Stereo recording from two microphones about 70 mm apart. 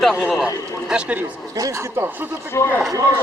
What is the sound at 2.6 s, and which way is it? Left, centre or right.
Speech, left.